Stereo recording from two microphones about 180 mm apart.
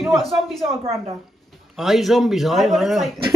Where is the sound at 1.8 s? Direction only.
Centre (ahead or behind).